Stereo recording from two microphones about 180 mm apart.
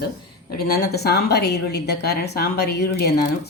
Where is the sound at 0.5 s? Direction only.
60° left (ahead or behind).